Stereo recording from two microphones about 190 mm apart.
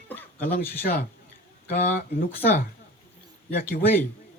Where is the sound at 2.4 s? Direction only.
40° left (ahead or behind).